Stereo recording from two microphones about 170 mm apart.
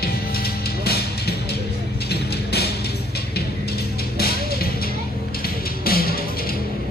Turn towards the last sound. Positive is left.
turn(degrees=60)  # may be behind; listen again after turning